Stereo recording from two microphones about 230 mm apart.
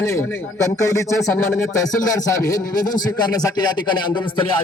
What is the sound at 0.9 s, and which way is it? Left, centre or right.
Speech, centre.